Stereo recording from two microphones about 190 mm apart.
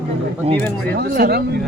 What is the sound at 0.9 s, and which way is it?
Speech, 55° right (ahead or behind).